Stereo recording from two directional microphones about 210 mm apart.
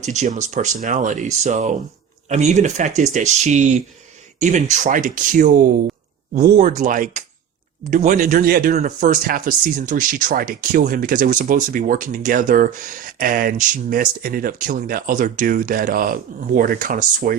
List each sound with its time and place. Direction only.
0.0 s speech: 35° right (ahead or behind)